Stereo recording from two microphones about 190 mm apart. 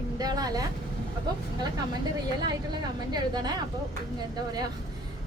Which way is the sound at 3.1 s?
20° right (ahead or behind).